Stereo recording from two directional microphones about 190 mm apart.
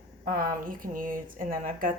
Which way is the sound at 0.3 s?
45° right (ahead or behind).